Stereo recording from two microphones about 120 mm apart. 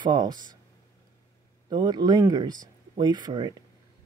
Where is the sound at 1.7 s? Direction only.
35° right (ahead or behind).